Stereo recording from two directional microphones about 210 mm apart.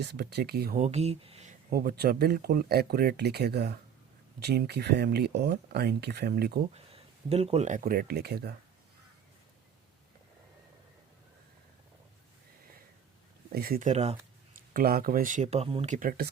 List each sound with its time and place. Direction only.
0.0 s speech: 50° right (ahead or behind); by 1.5 s 30° right (ahead or behind)
1.7 s speech: 45° right (ahead or behind)
6.7 s speech: 30° right (ahead or behind); by 8.5 s 50° right (ahead or behind)
13.5 s speech: 45° right (ahead or behind)